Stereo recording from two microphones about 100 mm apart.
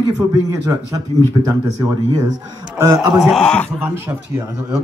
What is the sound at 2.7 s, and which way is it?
Speech, 30° right (ahead or behind).